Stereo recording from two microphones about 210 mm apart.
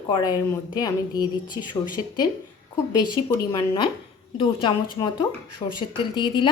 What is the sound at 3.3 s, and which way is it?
A woman's voice, 15° left (ahead or behind).